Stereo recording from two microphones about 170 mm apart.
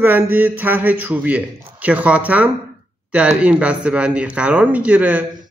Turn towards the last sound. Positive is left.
turn(degrees=-10)  # may be behind; listen again after turning